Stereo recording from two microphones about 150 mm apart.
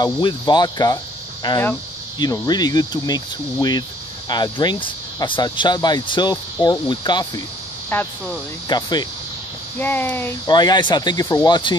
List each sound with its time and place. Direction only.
0.0 s speech: 30° left (ahead or behind)
7.9 s speech: 15° left (ahead or behind)
8.6 s speech: 30° left (ahead or behind)
9.8 s speech: 10° left (ahead or behind)
10.5 s speech: 30° left (ahead or behind)